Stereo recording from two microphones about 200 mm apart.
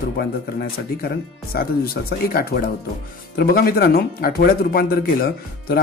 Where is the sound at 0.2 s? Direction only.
50° left (ahead or behind).